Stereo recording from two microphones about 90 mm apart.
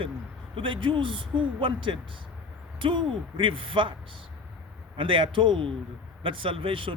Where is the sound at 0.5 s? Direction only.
70° right (ahead or behind).